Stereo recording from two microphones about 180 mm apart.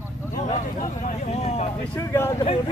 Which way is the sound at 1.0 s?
45° left (ahead or behind).